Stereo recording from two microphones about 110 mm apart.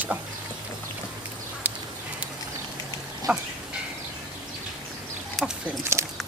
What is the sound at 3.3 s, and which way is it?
Goat, 20° right (ahead or behind).